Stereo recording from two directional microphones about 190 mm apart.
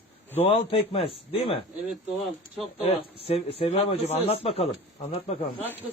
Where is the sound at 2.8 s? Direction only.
30° left (ahead or behind).